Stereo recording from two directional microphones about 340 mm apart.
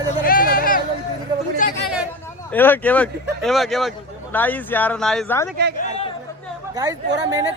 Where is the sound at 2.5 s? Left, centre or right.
Centre.